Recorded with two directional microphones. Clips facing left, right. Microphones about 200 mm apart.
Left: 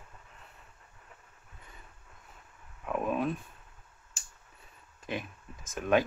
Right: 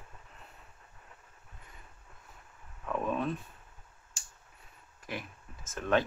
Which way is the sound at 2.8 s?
10° left (ahead or behind).